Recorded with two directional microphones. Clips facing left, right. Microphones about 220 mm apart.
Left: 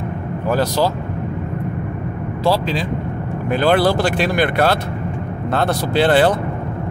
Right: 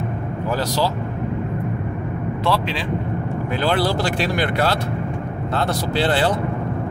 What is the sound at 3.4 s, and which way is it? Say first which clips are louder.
Speech: left 6 dB; 55° left (ahead or behind).